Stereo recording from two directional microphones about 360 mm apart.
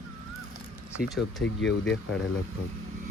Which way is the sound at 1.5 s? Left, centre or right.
Left.